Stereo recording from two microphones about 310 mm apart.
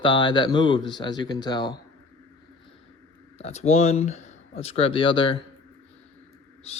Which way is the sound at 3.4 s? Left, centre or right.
Left.